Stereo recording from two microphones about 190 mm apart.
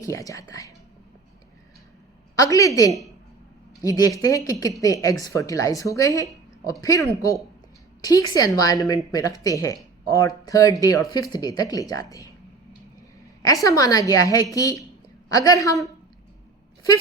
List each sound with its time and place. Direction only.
0.0 s speech: 15° left (ahead or behind)
2.3 s a woman's voice: 20° left (ahead or behind)
13.4 s a woman's voice: 20° left (ahead or behind)